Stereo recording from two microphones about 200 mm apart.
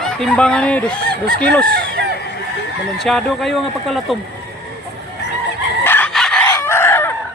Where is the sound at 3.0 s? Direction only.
Centre (ahead or behind).